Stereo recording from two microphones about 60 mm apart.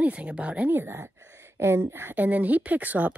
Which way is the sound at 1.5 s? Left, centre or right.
Right.